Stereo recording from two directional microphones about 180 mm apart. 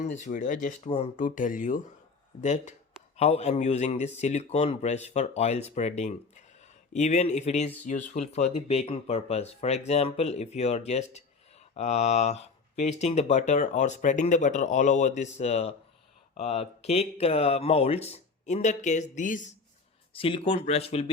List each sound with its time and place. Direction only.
0.1 s speech: 45° left (ahead or behind)
1.2 s speech: 45° left (ahead or behind)
20.1 s speech: 30° left (ahead or behind)